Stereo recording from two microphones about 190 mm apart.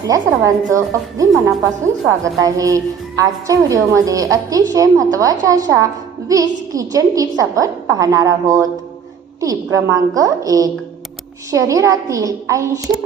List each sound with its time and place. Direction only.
0.0 s a woman's voice: 15° right (ahead or behind)